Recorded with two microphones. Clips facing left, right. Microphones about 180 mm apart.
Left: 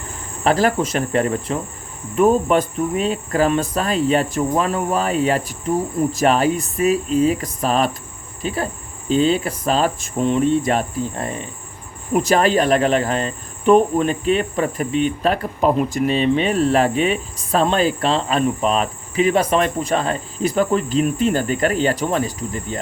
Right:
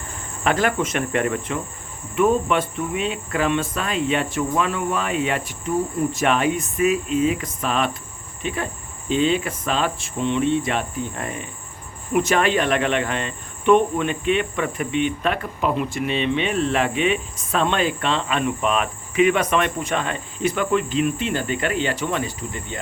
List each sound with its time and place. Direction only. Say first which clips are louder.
0.4 s speech: left 4 dB; 35° left (ahead or behind)